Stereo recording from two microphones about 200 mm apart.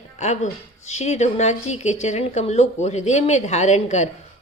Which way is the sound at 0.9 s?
35° left (ahead or behind).